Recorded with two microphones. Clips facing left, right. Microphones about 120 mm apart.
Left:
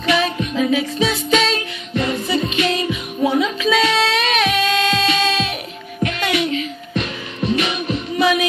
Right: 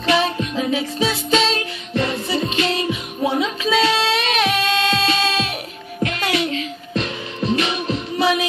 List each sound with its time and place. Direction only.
0.0 s music: 30° right (ahead or behind)